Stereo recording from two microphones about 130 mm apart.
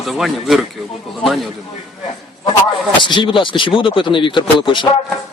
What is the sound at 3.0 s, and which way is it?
Speech, 40° left (ahead or behind).